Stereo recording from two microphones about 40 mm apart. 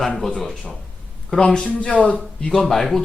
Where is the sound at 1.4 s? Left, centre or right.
Left.